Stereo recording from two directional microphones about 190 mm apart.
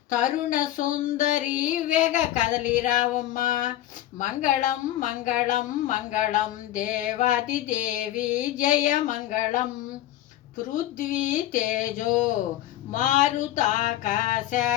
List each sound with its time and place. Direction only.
0.1 s female singing: 40° left (ahead or behind)
4.2 s speech: 40° left (ahead or behind)
10.9 s female singing: 40° left (ahead or behind)